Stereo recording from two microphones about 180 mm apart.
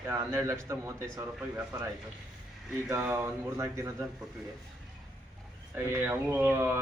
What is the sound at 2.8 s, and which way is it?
A man's voice, 10° right (ahead or behind).